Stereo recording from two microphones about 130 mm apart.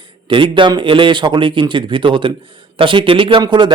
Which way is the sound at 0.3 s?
40° right (ahead or behind).